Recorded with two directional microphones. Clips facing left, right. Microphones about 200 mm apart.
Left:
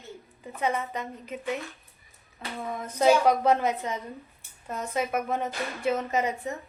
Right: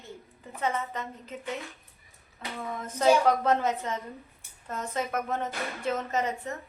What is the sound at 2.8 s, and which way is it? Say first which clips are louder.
Speech: left 1 dB; 15° left (ahead or behind).